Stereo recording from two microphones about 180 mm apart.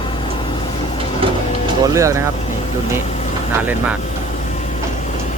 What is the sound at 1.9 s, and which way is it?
Speech, 15° right (ahead or behind).